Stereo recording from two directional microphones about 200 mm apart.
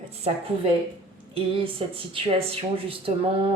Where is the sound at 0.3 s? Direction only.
30° right (ahead or behind).